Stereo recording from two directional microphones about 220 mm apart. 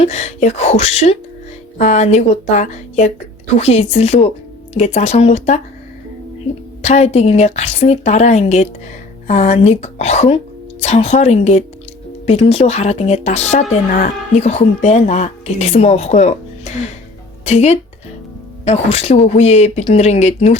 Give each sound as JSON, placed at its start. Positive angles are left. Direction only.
{"t": 0.0, "sound": "a woman's voice", "side_deg": 30}
{"t": 6.8, "sound": "a woman's voice", "side_deg": 30}
{"t": 17.4, "sound": "speech", "side_deg": 30}